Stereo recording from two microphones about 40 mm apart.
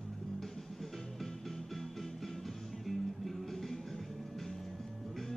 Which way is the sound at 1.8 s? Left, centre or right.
Centre.